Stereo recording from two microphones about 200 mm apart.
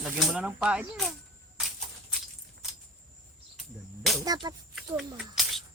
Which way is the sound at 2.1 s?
Centre (ahead or behind).